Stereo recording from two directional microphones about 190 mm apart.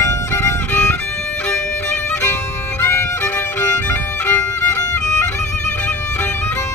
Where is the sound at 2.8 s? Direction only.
15° left (ahead or behind).